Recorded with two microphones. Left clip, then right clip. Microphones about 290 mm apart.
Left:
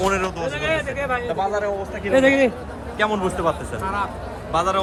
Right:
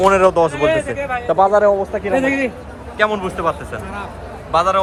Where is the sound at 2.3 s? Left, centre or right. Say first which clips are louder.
Left 2 dB; left.